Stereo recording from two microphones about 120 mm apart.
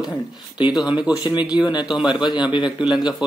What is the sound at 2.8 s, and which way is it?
Speech, 5° right (ahead or behind).